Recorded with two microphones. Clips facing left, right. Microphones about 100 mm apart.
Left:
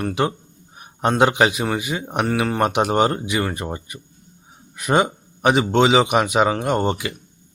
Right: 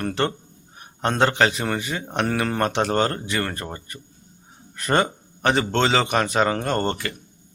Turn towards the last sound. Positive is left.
turn(degrees=10)  # may be behind; listen again after turning